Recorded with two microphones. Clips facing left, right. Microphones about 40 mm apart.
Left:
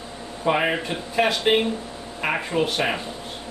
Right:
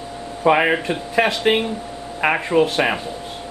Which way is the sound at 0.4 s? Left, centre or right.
Right.